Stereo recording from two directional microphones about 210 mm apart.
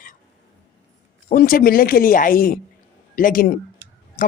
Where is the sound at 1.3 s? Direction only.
40° left (ahead or behind).